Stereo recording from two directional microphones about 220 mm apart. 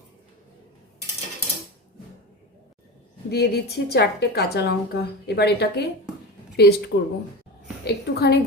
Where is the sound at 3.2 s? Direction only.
50° left (ahead or behind).